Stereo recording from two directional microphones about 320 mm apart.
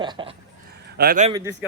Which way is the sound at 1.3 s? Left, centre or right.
Centre.